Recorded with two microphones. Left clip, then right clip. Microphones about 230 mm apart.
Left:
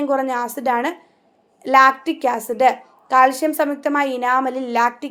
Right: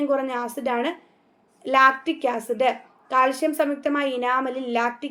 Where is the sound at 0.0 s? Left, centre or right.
Left.